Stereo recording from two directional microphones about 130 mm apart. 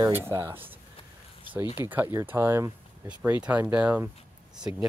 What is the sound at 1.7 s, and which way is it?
Speech, 15° right (ahead or behind).